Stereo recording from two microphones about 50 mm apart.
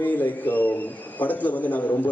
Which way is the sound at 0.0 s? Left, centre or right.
Left.